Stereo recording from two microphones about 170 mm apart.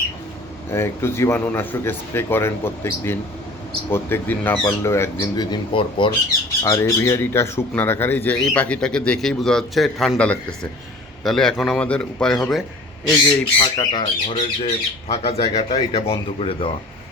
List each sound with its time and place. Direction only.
0.7 s a man's voice: 15° left (ahead or behind)
13.6 s speech: 25° left (ahead or behind)